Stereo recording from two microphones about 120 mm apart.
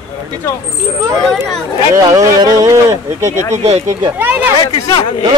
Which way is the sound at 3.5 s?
60° right (ahead or behind).